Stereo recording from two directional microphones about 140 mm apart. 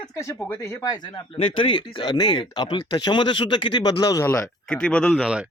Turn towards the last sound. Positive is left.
turn(degrees=5)  # may be behind; listen again after turning